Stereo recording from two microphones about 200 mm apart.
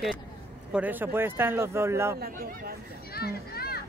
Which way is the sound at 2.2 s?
50° right (ahead or behind).